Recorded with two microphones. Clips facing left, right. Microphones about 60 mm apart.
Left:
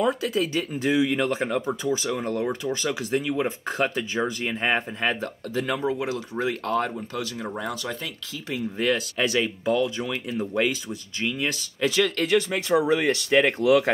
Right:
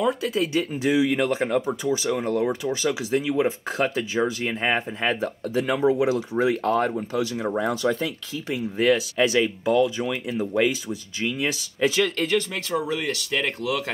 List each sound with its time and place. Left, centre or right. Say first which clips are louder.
0.0 s speech: even; centre
5.2 s speech: right 3 dB; centre; by 8.1 s right
8.7 s speech: right 5 dB; centre
11.4 s speech: right 4 dB; centre
12.4 s speech: left 4 dB; centre